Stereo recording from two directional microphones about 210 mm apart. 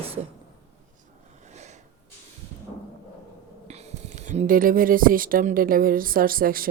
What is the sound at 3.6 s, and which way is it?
Speech, 30° right (ahead or behind).